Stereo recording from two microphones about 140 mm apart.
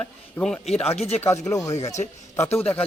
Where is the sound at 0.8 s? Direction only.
50° left (ahead or behind).